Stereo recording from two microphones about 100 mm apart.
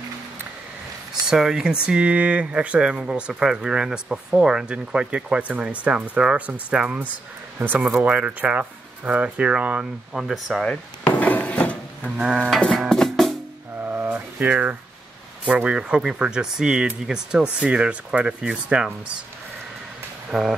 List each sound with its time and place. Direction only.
1.2 s speech: 5° right (ahead or behind)
11.1 s wood: 15° left (ahead or behind)
12.0 s speech: 10° right (ahead or behind)
12.5 s music: centre (ahead or behind)
13.8 s a sound: 20° right (ahead or behind)
15.4 s speech: 10° right (ahead or behind)
20.2 s speech: 5° right (ahead or behind)